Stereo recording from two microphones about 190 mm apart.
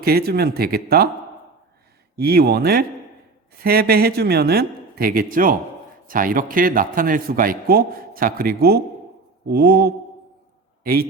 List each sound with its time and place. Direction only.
0.0 s speech: 55° right (ahead or behind)
2.1 s a man's voice: 55° right (ahead or behind)